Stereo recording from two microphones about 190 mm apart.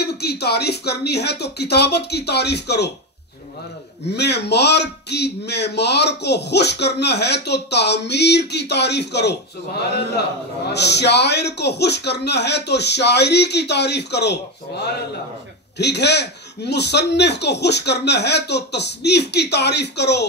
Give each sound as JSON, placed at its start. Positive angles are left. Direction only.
{"t": 0.0, "sound": "a man's voice", "side_deg": 60}
{"t": 4.1, "sound": "a man's voice", "side_deg": 60}
{"t": 10.7, "sound": "a man's voice", "side_deg": 60}
{"t": 15.8, "sound": "a man's voice", "side_deg": 65}